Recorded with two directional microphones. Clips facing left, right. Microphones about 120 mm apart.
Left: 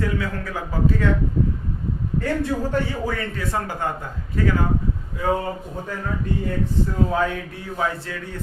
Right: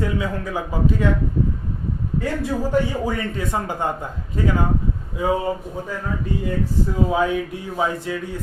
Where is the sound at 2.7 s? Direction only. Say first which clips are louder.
Right 3 dB; 15° right (ahead or behind).